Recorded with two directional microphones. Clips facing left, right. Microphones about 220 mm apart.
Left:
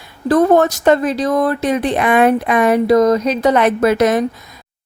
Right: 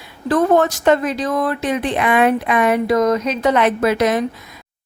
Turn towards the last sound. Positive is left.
turn(degrees=45)  # may be behind; listen again after turning